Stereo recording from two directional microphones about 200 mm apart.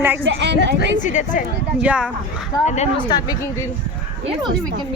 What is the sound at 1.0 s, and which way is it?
Speech, 40° left (ahead or behind).